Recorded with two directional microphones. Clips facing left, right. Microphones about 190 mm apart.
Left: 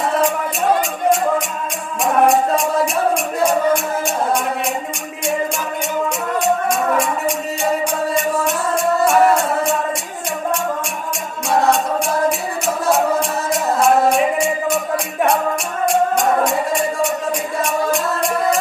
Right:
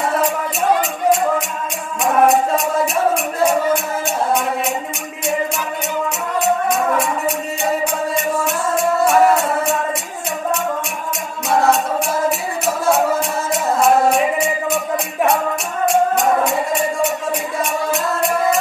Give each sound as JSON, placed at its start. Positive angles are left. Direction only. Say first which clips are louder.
{"t": 0.8, "sound": "music", "louder": "even", "side_deg": 0}
{"t": 6.1, "sound": "music", "louder": "right 1 dB", "side_deg": 0}
{"t": 11.4, "sound": "music", "louder": "even", "side_deg": 0}